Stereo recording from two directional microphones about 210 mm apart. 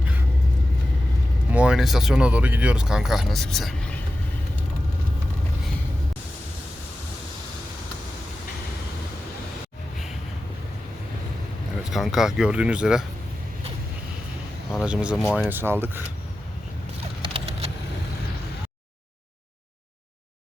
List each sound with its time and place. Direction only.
1.5 s speech: 5° right (ahead or behind)
11.9 s speech: centre (ahead or behind)
14.8 s speech: 5° right (ahead or behind)
17.2 s a sound: 25° right (ahead or behind)